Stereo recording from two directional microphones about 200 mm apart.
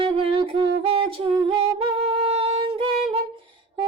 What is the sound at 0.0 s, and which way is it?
Music, 25° right (ahead or behind).